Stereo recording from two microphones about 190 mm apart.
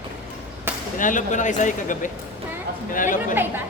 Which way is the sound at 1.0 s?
40° left (ahead or behind).